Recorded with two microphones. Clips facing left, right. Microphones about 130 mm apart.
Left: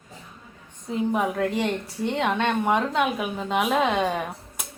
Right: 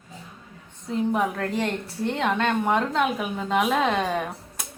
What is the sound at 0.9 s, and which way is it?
A woman's voice, 5° left (ahead or behind).